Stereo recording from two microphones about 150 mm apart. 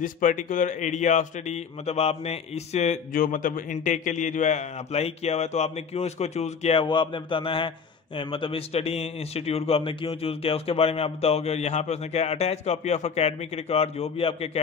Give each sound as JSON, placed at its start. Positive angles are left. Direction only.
{"t": 0.0, "sound": "a man's voice", "side_deg": 60}
{"t": 3.1, "sound": "a man's voice", "side_deg": 65}